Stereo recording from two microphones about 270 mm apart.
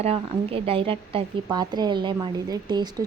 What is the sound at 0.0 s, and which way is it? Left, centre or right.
A woman's voice, right.